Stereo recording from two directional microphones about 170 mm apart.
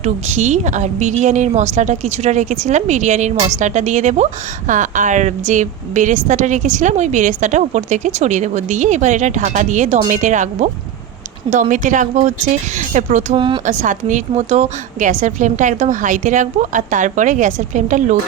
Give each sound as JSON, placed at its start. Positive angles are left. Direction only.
{"t": 0.0, "sound": "a woman's voice", "side_deg": -40}